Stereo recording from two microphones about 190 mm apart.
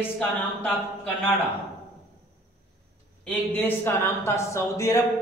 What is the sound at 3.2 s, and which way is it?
Speech, 10° left (ahead or behind).